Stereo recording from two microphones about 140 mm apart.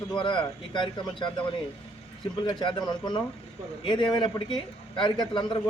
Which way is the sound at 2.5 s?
35° left (ahead or behind).